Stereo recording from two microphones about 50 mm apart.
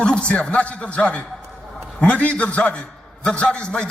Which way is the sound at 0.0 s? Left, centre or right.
Left.